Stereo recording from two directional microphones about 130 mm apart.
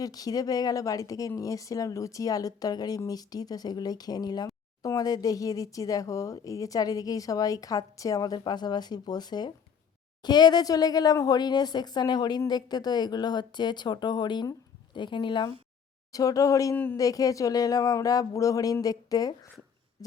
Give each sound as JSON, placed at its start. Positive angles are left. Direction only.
{"t": 0.0, "sound": "speech", "side_deg": 30}
{"t": 16.1, "sound": "speech", "side_deg": 25}
{"t": 16.7, "sound": "speech", "side_deg": 15}
{"t": 17.0, "sound": "speech", "side_deg": 25}
{"t": 20.0, "sound": "a sound", "side_deg": 30}